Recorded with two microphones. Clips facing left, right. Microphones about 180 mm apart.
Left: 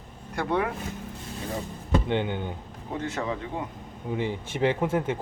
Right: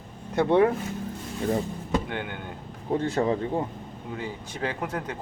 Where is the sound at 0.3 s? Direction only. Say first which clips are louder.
Right 7 dB; 30° right (ahead or behind).